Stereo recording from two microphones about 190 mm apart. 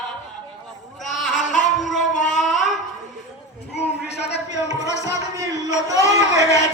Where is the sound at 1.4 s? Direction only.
40° left (ahead or behind).